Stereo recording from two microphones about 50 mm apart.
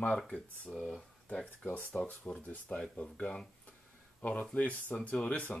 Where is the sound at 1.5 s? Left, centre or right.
Left.